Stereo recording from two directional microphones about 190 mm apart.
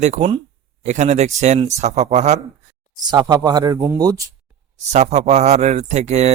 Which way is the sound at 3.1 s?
20° right (ahead or behind).